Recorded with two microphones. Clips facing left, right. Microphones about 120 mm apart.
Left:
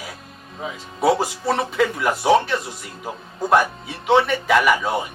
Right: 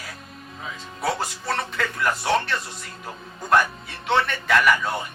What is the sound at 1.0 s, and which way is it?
Speech, 10° left (ahead or behind).